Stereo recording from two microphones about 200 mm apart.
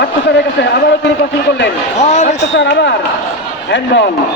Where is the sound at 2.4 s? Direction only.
60° left (ahead or behind).